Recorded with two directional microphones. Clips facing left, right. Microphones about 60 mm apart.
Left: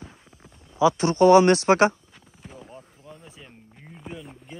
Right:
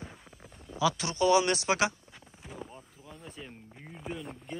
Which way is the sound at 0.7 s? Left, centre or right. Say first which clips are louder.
Left 8 dB; left.